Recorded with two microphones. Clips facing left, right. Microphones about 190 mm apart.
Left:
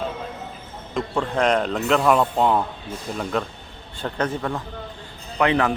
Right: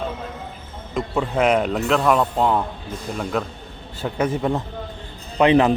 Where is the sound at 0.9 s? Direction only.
5° right (ahead or behind).